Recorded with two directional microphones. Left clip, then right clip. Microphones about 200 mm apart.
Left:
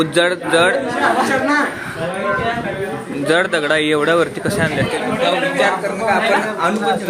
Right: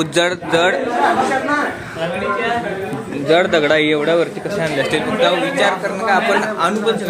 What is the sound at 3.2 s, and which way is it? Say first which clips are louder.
A man's voice: right 2 dB; 10° left (ahead or behind).